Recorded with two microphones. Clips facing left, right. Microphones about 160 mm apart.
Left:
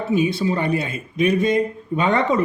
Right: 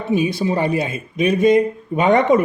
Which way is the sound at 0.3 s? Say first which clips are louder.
Right 2 dB; 20° right (ahead or behind).